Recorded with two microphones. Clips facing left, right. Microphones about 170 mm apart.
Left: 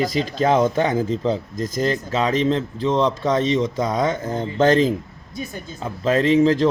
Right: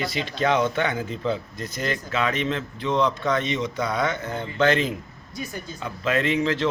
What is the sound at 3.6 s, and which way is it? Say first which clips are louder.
Speech: left 5 dB; 40° left (ahead or behind).